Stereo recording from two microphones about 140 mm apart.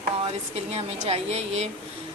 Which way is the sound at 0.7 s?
50° right (ahead or behind).